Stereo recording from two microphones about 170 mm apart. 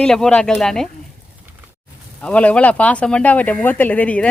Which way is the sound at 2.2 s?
10° left (ahead or behind).